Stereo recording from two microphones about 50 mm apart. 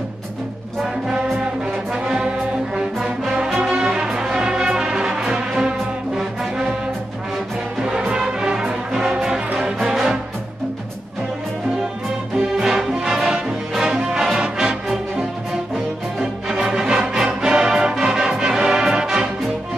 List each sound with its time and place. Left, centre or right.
1.9 s music: centre
8.1 s music: centre
9.8 s music: centre
12.4 s music: centre
16.4 s music: centre